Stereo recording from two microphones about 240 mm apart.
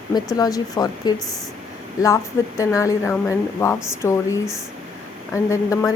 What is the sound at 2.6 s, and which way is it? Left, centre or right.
A woman's voice, centre.